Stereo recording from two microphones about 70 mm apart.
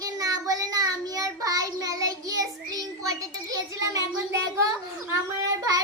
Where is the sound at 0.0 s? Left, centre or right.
Right.